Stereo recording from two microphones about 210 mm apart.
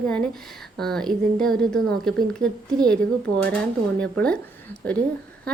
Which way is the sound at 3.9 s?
5° left (ahead or behind).